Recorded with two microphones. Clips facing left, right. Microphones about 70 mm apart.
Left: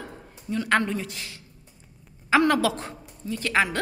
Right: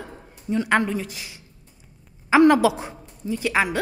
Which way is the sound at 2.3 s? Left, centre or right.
Centre.